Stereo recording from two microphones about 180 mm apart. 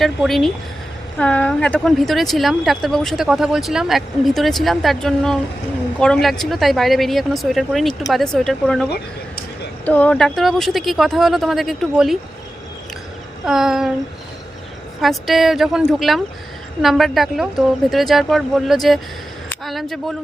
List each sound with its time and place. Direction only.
0.0 s speech: centre (ahead or behind)
13.4 s speech: centre (ahead or behind)
15.0 s speech: centre (ahead or behind)